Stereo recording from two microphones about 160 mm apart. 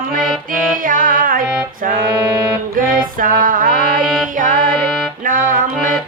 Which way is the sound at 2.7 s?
60° right (ahead or behind).